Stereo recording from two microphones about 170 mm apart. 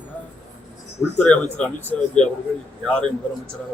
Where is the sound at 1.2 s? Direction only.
10° left (ahead or behind).